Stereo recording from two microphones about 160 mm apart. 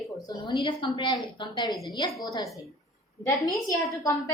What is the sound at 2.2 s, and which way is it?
A woman's voice, 25° left (ahead or behind).